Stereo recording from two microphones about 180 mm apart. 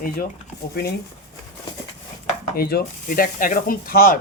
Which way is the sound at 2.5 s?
60° left (ahead or behind).